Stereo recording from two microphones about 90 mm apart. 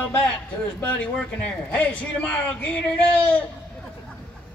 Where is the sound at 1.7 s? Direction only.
15° left (ahead or behind).